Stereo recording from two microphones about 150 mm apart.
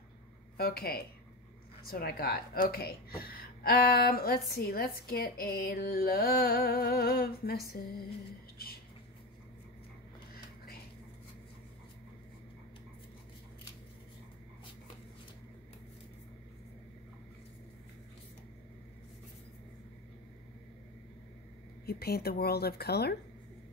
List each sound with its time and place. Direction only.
0.6 s speech: 90° left
10.3 s a sound: 85° left
21.8 s speech: 90° left